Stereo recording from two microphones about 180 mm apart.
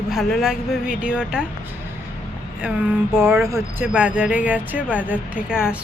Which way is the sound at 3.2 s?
15° right (ahead or behind).